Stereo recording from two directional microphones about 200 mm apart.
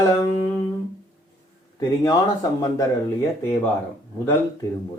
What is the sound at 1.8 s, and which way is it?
Speech, 20° left (ahead or behind).